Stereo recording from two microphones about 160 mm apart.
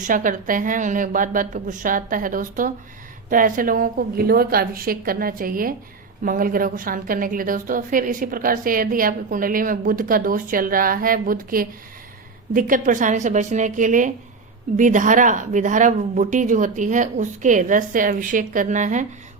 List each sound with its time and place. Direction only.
0.0 s a woman's voice: 55° right (ahead or behind)